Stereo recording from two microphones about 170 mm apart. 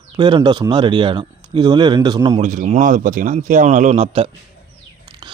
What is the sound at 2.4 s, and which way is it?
Speech, 45° right (ahead or behind).